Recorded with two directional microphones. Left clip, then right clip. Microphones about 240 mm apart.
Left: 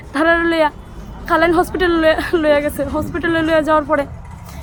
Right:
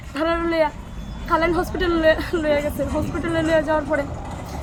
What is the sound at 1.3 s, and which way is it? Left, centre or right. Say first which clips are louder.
Speech: left 6 dB; centre.